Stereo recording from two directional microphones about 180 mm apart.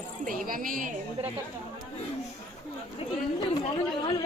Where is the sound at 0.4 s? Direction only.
50° right (ahead or behind).